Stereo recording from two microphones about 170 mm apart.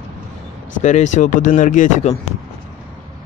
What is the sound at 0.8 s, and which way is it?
Speech, 45° left (ahead or behind).